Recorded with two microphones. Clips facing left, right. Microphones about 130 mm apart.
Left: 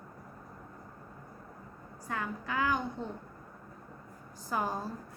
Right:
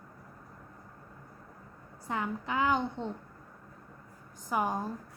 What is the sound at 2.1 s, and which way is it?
A woman's voice, 20° right (ahead or behind).